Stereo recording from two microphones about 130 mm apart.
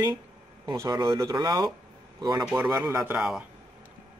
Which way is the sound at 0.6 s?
30° right (ahead or behind).